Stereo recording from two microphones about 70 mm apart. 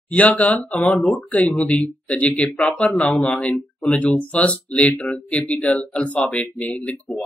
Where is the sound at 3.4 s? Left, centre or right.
Left.